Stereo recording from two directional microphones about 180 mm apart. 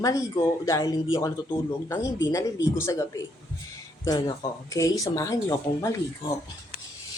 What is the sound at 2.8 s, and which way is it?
A woman's voice, 15° left (ahead or behind).